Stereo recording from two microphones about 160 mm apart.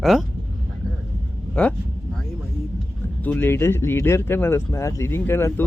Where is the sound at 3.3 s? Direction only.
15° left (ahead or behind).